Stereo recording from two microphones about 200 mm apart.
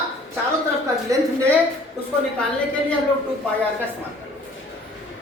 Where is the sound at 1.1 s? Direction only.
15° right (ahead or behind).